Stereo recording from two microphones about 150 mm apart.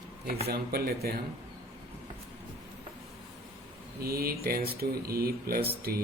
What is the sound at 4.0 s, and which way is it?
Speech, 90° right.